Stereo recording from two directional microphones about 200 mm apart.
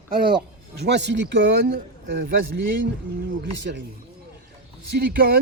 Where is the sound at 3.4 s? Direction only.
60° right (ahead or behind).